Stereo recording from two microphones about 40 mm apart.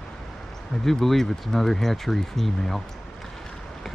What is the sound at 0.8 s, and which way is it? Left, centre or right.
Speech, centre.